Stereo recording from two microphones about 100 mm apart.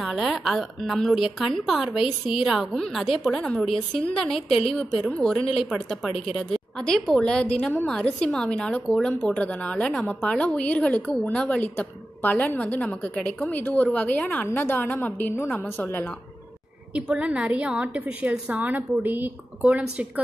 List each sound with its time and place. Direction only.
0.0 s a woman's voice: centre (ahead or behind)
7.2 s a woman's voice: 10° left (ahead or behind)
16.9 s a woman's voice: 10° right (ahead or behind)